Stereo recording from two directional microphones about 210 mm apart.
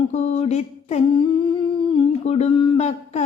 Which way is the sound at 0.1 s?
30° left (ahead or behind).